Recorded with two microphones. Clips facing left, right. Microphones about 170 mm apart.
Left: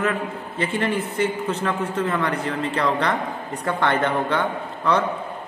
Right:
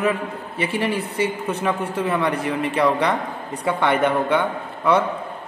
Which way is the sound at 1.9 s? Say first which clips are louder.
Right 2 dB; 10° right (ahead or behind).